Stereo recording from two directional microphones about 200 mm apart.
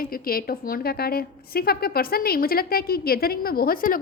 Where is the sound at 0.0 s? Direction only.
45° left (ahead or behind).